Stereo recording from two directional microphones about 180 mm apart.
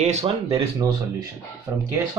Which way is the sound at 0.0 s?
40° right (ahead or behind).